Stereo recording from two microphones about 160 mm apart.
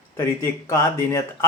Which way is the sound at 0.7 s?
15° left (ahead or behind).